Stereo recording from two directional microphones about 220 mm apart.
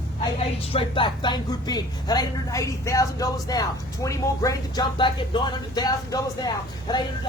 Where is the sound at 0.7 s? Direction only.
25° left (ahead or behind).